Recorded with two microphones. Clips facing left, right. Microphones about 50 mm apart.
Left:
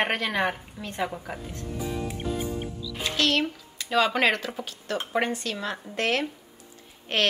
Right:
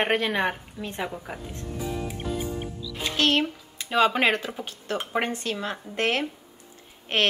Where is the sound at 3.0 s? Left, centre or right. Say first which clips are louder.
Right 1 dB; right.